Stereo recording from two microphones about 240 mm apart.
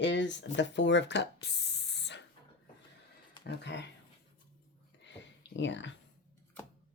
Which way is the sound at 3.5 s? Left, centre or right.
Left.